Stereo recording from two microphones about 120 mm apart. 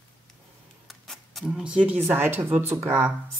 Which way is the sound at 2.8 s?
15° right (ahead or behind).